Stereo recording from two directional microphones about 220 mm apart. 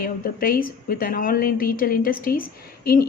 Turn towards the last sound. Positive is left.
turn(degrees=40)  # may be behind; listen again after turning